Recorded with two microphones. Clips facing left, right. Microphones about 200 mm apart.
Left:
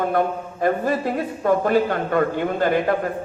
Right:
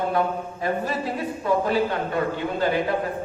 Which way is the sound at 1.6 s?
50° left (ahead or behind).